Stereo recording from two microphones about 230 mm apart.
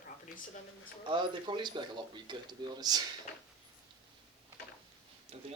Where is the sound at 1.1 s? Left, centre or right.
Right.